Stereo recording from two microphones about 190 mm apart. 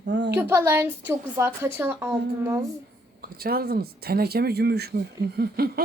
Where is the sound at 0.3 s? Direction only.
15° right (ahead or behind).